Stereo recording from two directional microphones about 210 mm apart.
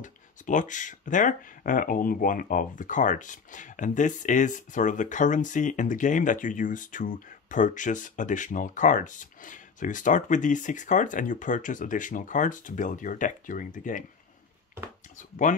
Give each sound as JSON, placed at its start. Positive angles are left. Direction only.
{"t": 0.0, "sound": "speech", "side_deg": 35}